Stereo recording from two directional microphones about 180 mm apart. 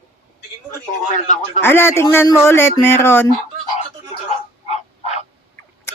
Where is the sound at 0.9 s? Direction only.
45° left (ahead or behind).